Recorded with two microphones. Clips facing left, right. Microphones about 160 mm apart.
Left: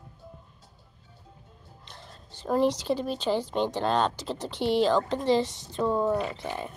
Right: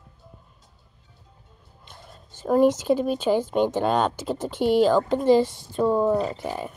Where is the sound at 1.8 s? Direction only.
10° right (ahead or behind).